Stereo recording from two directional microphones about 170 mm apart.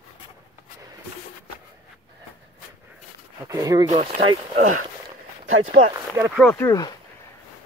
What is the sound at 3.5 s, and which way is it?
Speech, 20° right (ahead or behind).